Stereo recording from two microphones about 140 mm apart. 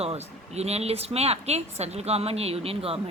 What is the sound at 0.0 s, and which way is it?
A woman's voice, 45° right (ahead or behind).